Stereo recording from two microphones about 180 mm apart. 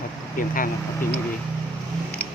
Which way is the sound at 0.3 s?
50° left (ahead or behind).